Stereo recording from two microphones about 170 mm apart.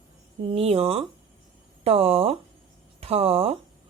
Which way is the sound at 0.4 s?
35° right (ahead or behind).